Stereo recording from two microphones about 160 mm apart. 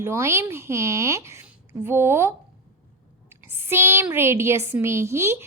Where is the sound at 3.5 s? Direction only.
15° right (ahead or behind).